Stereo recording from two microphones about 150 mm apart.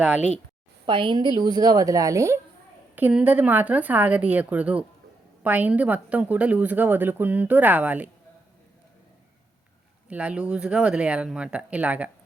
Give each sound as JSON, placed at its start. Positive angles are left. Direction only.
{"t": 0.0, "sound": "speech", "side_deg": -5}
{"t": 0.9, "sound": "a woman's voice", "side_deg": -35}
{"t": 10.1, "sound": "speech", "side_deg": -10}